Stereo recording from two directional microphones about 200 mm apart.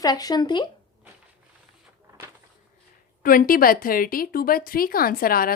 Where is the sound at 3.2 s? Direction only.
45° left (ahead or behind).